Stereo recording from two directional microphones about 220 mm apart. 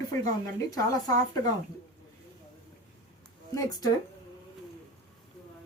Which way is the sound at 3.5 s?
15° left (ahead or behind).